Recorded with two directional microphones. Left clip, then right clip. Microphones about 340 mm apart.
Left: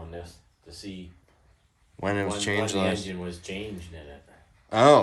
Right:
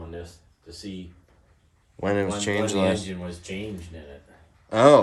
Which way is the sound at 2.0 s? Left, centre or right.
Centre.